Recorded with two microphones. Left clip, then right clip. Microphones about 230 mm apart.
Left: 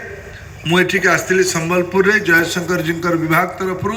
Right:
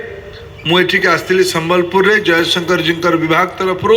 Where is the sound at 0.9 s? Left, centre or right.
Right.